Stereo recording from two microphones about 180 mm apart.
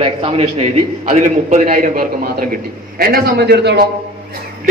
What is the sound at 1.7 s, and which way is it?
A man's voice, 55° right (ahead or behind).